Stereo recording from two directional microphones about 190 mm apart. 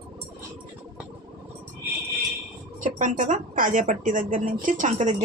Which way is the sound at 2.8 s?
40° right (ahead or behind).